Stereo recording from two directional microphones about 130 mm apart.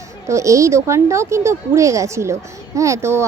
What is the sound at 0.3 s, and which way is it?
Speech, 25° right (ahead or behind).